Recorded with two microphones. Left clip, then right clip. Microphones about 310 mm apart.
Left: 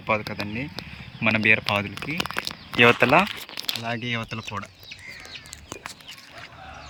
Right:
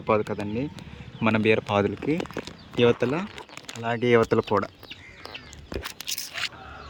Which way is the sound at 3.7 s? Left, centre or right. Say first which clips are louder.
Right 8 dB; centre.